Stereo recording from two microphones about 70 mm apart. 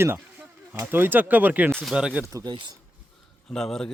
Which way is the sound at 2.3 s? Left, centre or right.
Right.